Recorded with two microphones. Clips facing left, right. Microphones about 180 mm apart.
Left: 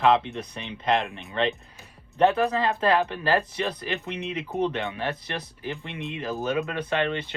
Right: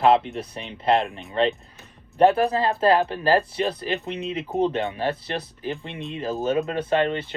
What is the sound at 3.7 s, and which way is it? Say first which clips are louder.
Speech: right 4 dB; 20° right (ahead or behind).